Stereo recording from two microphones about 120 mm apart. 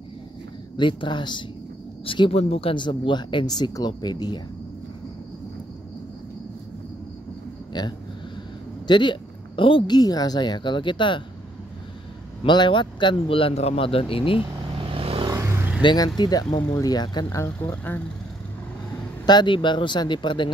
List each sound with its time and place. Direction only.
0.7 s speech: 40° left (ahead or behind)
7.7 s speech: 35° left (ahead or behind)
12.4 s a man's voice: 40° left (ahead or behind)
15.0 s vehicle: 50° right (ahead or behind)
15.2 s vehicle: 25° right (ahead or behind)
15.8 s speech: 40° left (ahead or behind)
17.6 s speech: 15° left (ahead or behind)
19.2 s speech: 40° left (ahead or behind)